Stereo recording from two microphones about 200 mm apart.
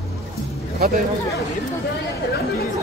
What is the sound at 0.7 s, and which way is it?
Speech, 45° right (ahead or behind).